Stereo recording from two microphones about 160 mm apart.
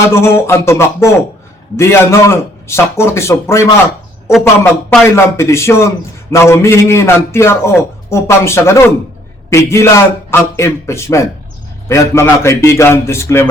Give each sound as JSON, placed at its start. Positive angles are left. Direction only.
{"t": 0.0, "sound": "a man's voice", "side_deg": 15}
{"t": 5.0, "sound": "a man's voice", "side_deg": 15}